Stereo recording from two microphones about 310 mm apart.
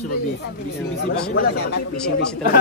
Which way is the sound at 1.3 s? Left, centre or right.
Left.